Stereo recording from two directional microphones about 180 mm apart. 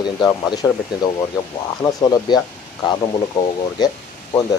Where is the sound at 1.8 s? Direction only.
20° left (ahead or behind).